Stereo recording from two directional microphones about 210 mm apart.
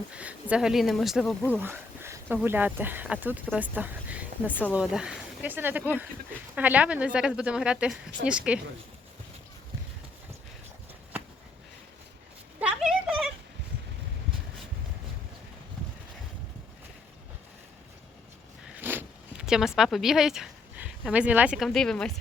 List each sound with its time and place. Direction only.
0.1 s a woman's voice: 5° right (ahead or behind)
1.5 s a woman's voice: 10° right (ahead or behind)
12.5 s a sound: 5° right (ahead or behind)
18.8 s zipper: 10° right (ahead or behind)
21.1 s a woman's voice: 5° right (ahead or behind)